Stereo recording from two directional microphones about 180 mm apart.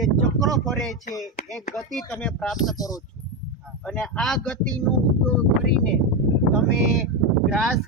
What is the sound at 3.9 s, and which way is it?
Speech, 5° left (ahead or behind).